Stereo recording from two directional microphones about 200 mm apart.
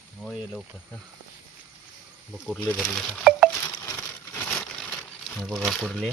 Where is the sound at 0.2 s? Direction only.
Centre (ahead or behind).